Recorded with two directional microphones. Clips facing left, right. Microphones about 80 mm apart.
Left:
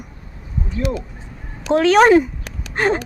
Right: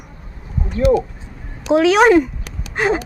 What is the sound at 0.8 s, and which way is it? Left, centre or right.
Speech, right.